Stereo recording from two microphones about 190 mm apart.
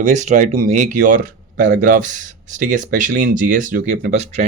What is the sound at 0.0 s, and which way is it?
Speech, 40° right (ahead or behind).